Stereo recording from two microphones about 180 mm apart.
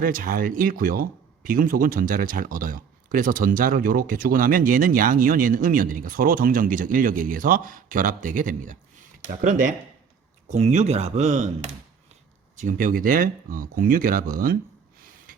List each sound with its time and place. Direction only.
0.0 s speech: 50° right (ahead or behind)